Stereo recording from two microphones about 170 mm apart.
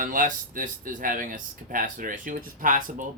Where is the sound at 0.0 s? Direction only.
55° right (ahead or behind).